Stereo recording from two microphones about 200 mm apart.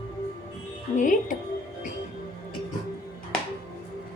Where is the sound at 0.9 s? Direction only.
40° left (ahead or behind).